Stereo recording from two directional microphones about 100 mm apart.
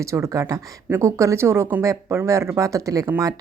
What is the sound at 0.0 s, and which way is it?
A woman's voice, 30° right (ahead or behind).